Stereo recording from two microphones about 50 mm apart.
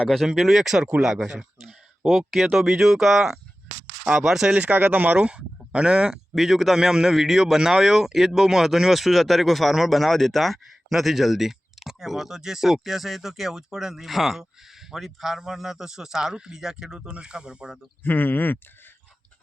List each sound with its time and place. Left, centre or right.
0.3 s a man's voice: centre
4.7 s speech: right
5.1 s speech: right
6.3 s a man's voice: centre
18.0 s speech: left